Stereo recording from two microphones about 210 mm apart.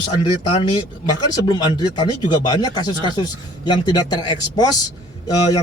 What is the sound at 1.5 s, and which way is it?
A man's voice, 20° left (ahead or behind).